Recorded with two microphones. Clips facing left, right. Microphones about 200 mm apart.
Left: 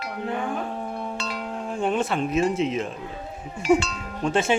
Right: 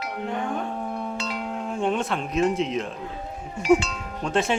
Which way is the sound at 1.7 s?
Centre (ahead or behind).